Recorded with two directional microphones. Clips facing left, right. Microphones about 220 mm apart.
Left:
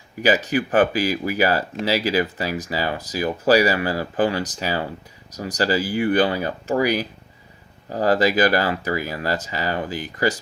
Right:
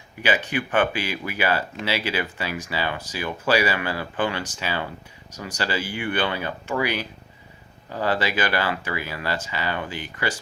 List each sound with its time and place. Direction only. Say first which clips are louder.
0.2 s speech: left 5 dB; 35° left (ahead or behind)